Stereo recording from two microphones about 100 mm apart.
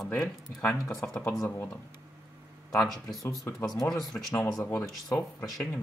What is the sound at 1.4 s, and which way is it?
Speech, 25° left (ahead or behind).